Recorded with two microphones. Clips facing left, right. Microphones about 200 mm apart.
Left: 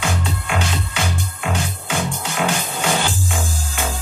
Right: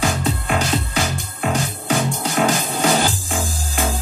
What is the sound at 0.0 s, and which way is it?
Music, 40° right (ahead or behind).